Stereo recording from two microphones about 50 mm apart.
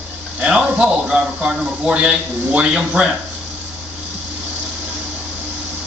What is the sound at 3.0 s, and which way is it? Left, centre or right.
Speech, right.